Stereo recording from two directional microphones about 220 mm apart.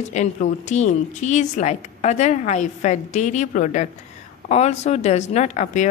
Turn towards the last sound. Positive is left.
turn(degrees=35)  # may be behind; listen again after turning